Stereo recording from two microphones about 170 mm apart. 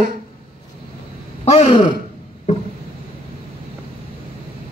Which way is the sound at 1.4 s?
35° left (ahead or behind).